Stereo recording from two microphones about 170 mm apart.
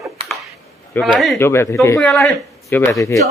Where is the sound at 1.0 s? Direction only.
Centre (ahead or behind).